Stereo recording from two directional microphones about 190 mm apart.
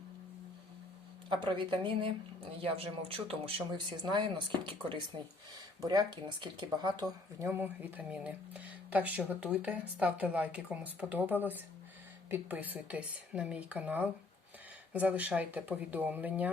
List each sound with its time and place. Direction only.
1.3 s speech: 25° right (ahead or behind); by 16.5 s 10° right (ahead or behind)